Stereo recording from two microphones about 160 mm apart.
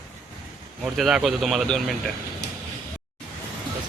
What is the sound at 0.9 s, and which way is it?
Speech, centre (ahead or behind).